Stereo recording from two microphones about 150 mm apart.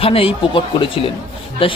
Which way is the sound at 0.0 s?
40° left (ahead or behind).